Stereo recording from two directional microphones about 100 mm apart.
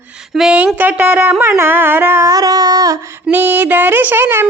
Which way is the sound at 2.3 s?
40° right (ahead or behind).